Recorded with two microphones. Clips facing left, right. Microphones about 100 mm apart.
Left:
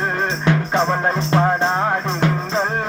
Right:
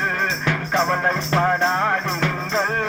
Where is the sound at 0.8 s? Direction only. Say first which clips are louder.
Left 2 dB; 20° left (ahead or behind).